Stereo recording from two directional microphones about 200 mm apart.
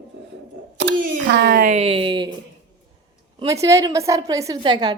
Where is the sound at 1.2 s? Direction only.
55° right (ahead or behind).